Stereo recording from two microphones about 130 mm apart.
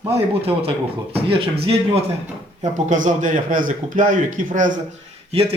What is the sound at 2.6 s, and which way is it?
A man's voice, 70° right (ahead or behind).